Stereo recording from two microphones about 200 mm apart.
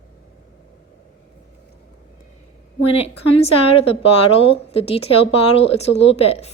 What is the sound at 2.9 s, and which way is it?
A woman's voice, 30° left (ahead or behind).